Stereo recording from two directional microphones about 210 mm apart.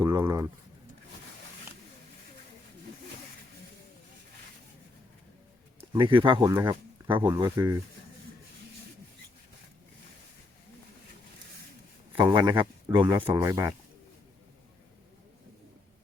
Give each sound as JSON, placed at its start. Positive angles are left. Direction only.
{"t": 0.0, "sound": "speech", "side_deg": -10}
{"t": 6.0, "sound": "speech", "side_deg": -25}
{"t": 12.2, "sound": "speech", "side_deg": -20}